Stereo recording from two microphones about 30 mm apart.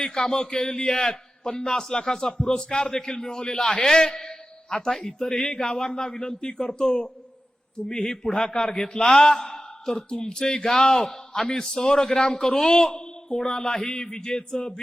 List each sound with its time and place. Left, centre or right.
0.0 s a man's voice: left
4.2 s a man's voice: centre
7.9 s a man's voice: left